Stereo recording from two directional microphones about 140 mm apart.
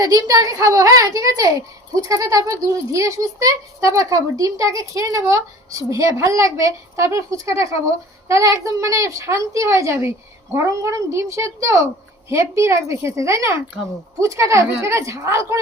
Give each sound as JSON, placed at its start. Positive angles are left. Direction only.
{"t": 0.0, "sound": "speech", "side_deg": -25}